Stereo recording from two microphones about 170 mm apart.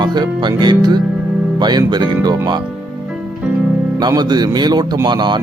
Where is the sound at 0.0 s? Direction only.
25° right (ahead or behind).